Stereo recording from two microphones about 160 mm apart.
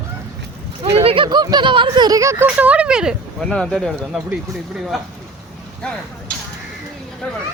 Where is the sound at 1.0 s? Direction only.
35° right (ahead or behind); by 4.2 s centre (ahead or behind).